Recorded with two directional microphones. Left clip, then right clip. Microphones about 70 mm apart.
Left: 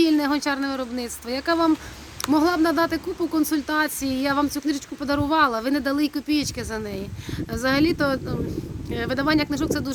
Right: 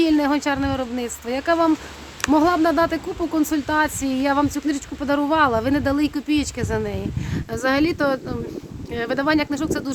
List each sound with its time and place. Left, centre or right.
0.0 s a sound: right
0.3 s speech: right
2.3 s speech: right
4.9 s speech: right